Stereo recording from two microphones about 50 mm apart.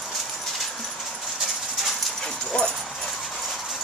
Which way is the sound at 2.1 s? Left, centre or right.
Centre.